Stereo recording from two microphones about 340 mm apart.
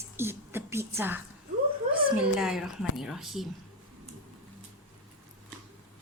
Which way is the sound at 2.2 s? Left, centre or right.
Centre.